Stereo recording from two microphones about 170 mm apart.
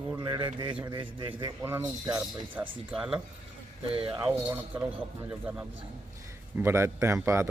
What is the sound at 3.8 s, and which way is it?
Speech, 35° right (ahead or behind).